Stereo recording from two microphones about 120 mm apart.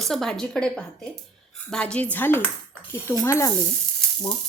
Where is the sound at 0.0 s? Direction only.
5° left (ahead or behind); by 3.5 s 25° left (ahead or behind).